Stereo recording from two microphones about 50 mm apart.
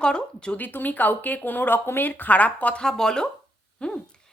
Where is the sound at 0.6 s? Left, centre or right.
Left.